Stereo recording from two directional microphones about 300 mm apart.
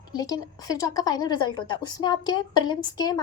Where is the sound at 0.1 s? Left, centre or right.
Centre.